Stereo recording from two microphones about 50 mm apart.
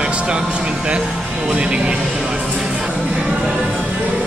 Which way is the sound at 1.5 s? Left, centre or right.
Right.